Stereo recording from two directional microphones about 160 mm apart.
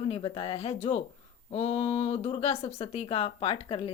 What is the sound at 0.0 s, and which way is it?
Speech, 35° left (ahead or behind).